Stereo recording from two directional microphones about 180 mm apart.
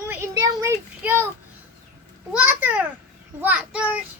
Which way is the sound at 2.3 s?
10° right (ahead or behind).